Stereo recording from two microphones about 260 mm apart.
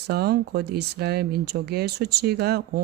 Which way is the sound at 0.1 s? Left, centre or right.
Right.